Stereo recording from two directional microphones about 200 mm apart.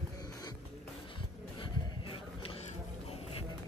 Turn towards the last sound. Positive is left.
turn(degrees=30)  # may be behind; listen again after turning